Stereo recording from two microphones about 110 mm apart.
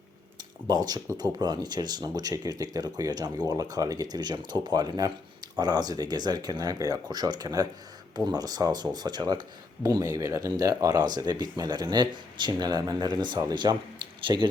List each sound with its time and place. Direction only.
0.7 s speech: 40° right (ahead or behind)